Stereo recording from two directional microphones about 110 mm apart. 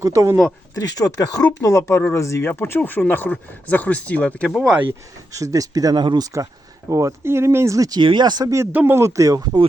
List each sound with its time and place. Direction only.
0.0 s speech: 30° right (ahead or behind)
0.8 s speech: 30° left (ahead or behind); by 4.4 s 15° left (ahead or behind)
4.4 s speech: 5° right (ahead or behind)
5.3 s speech: 30° right (ahead or behind)
6.3 s speech: 30° right (ahead or behind)
8.7 s speech: 20° right (ahead or behind)